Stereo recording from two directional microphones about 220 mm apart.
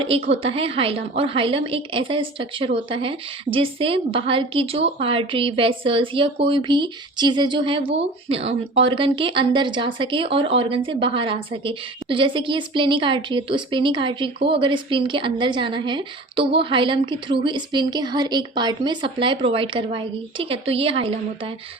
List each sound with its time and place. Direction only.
0.0 s a woman's voice: 25° right (ahead or behind)